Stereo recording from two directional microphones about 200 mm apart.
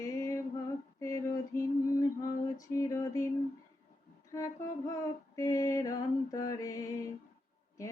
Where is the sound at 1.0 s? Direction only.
15° left (ahead or behind).